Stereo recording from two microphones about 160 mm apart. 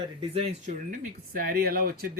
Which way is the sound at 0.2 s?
35° right (ahead or behind).